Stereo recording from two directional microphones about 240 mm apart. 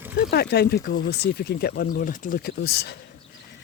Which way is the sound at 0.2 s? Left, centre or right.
Left.